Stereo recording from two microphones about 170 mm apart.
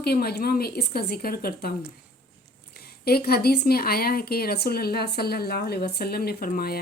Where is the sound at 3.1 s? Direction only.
65° left (ahead or behind).